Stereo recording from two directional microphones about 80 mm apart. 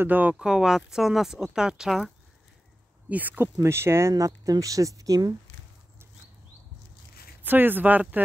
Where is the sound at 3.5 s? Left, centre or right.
Right.